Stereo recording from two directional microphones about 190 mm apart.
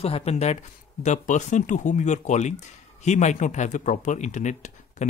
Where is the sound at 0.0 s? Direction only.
30° left (ahead or behind).